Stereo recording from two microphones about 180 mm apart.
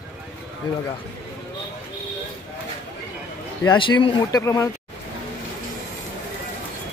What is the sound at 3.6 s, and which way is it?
Speech, 25° left (ahead or behind).